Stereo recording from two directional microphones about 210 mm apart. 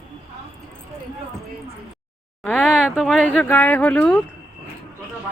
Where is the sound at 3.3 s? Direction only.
10° left (ahead or behind).